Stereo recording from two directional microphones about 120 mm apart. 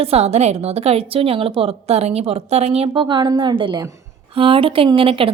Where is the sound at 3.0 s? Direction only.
40° right (ahead or behind).